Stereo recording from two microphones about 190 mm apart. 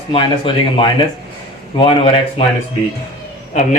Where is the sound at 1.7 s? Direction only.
30° left (ahead or behind).